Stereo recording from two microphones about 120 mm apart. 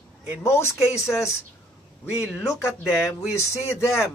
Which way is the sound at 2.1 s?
5° right (ahead or behind).